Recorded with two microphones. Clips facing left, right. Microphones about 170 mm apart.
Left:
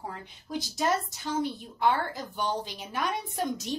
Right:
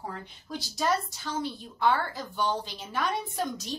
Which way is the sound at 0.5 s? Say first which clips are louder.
Left 1 dB; 20° left (ahead or behind).